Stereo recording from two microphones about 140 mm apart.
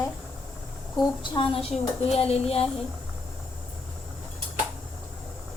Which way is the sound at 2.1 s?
45° left (ahead or behind).